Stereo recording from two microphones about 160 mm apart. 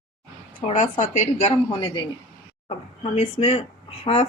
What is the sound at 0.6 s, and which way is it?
Speech, 50° left (ahead or behind).